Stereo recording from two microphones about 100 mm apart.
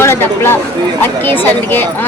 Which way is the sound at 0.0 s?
25° left (ahead or behind).